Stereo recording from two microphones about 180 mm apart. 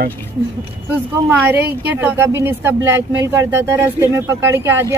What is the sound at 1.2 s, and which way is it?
A woman's voice, 10° right (ahead or behind).